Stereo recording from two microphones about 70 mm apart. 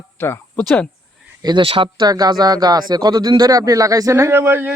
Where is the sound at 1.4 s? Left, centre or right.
Right.